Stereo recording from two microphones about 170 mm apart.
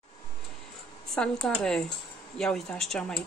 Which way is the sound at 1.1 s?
5° left (ahead or behind).